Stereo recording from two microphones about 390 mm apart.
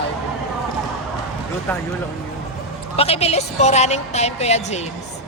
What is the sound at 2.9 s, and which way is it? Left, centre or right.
A woman's voice, centre.